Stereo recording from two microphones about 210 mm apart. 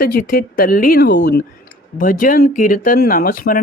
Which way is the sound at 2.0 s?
40° left (ahead or behind).